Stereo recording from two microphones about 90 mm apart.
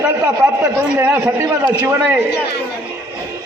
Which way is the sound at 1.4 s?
40° right (ahead or behind).